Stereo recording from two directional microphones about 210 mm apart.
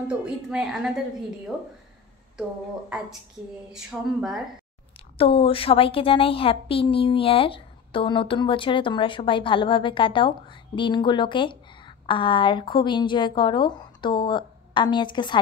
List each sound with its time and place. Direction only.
0.1 s a woman's voice: 5° right (ahead or behind)
3.7 s a woman's voice: centre (ahead or behind)
5.1 s a woman's voice: 25° left (ahead or behind)